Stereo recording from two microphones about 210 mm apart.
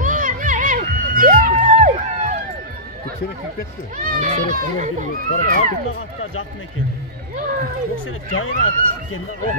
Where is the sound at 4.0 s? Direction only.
35° right (ahead or behind).